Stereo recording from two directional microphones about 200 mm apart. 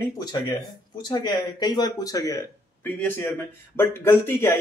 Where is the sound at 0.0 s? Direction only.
20° left (ahead or behind).